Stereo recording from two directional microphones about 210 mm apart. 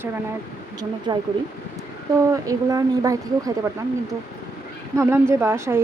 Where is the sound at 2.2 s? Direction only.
15° right (ahead or behind).